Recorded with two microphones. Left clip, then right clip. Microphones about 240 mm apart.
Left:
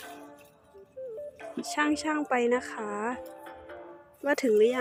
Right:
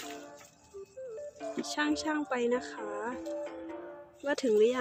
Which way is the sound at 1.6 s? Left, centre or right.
Centre.